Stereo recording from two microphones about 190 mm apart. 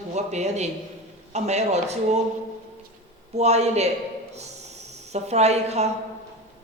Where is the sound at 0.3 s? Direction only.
35° right (ahead or behind).